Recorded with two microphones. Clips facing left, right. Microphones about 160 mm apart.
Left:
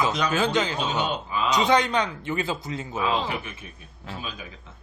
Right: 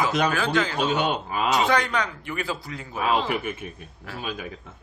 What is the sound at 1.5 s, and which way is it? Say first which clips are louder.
Speech: left 2 dB; 20° left (ahead or behind).